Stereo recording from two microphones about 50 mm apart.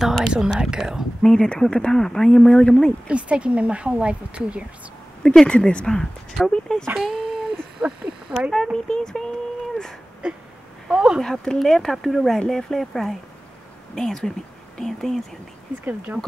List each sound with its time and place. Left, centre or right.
0.0 s speech: centre
1.2 s speech: centre
3.1 s speech: right
5.2 s speech: centre
5.5 s speech: centre
6.9 s speech: centre
8.7 s speech: centre
11.1 s speech: centre
15.8 s speech: right